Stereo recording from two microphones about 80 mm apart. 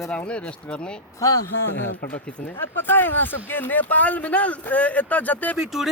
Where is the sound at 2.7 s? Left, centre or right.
Left.